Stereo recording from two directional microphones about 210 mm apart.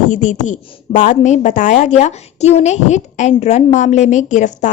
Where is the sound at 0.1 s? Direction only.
35° left (ahead or behind).